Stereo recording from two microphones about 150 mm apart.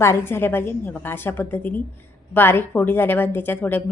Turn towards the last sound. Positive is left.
turn(degrees=15)  # may be behind; listen again after turning